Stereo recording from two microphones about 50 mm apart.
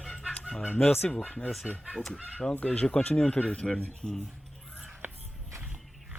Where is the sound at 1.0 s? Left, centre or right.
Centre.